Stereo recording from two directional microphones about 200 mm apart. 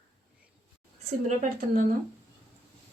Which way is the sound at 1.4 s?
40° right (ahead or behind).